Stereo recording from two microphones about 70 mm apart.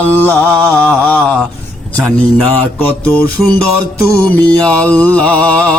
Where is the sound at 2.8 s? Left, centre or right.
Left.